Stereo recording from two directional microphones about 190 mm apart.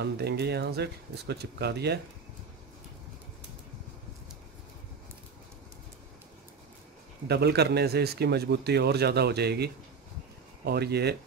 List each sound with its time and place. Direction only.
0.0 s a man's voice: 60° right (ahead or behind)
7.2 s a man's voice: 60° right (ahead or behind)